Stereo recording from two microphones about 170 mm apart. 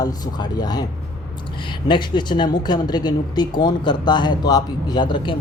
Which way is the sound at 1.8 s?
25° left (ahead or behind).